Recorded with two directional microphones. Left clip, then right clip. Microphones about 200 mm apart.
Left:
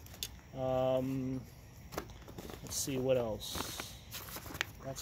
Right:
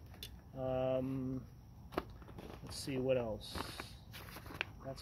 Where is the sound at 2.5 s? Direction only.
15° left (ahead or behind).